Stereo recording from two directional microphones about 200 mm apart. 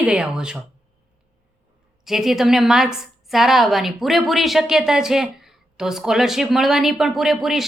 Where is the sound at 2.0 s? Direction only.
Centre (ahead or behind).